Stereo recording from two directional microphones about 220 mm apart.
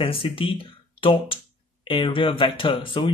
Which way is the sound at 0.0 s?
25° left (ahead or behind).